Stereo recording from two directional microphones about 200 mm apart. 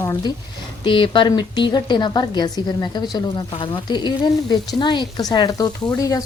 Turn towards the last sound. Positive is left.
turn(degrees=15)  # may be behind; listen again after turning